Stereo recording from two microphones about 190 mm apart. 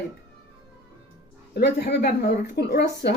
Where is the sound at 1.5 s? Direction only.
60° left (ahead or behind).